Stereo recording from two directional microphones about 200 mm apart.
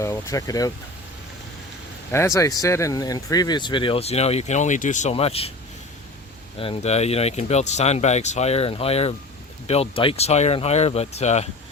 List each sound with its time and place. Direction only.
0.0 s speech: 15° left (ahead or behind)
2.1 s speech: 15° left (ahead or behind)
6.6 s speech: 30° left (ahead or behind)